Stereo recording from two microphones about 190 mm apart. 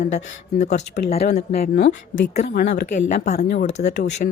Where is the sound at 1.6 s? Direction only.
60° left (ahead or behind).